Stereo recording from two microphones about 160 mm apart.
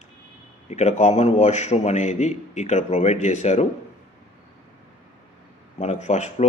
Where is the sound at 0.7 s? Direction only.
45° left (ahead or behind).